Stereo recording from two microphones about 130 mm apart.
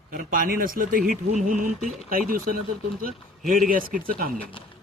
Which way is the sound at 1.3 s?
80° right.